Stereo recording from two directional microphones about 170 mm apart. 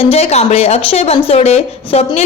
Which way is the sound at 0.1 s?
40° left (ahead or behind).